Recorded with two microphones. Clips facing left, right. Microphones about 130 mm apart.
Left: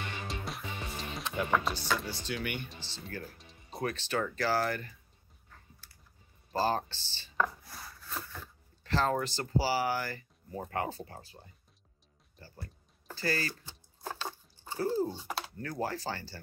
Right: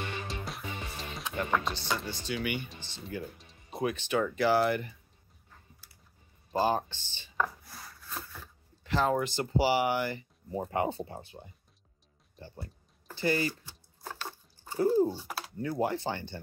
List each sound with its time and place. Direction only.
0.3 s music: centre (ahead or behind)
2.0 s speech: 5° left (ahead or behind)
3.3 s music: centre (ahead or behind)
3.9 s speech: 15° right (ahead or behind)
6.5 s speech: 15° right (ahead or behind)
7.3 s rub: centre (ahead or behind)
8.8 s a sound: 10° right (ahead or behind)
9.2 s speech: 15° right (ahead or behind)
12.4 s a sound: 25° right (ahead or behind)
13.7 s a sound: 20° left (ahead or behind)
14.8 s speech: 15° right (ahead or behind)